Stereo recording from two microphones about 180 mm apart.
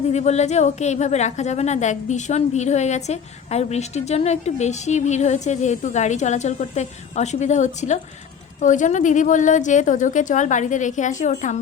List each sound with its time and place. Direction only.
0.1 s a woman's voice: 40° left (ahead or behind)